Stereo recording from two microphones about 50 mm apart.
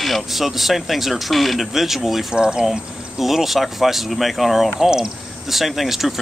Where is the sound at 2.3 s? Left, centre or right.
Centre.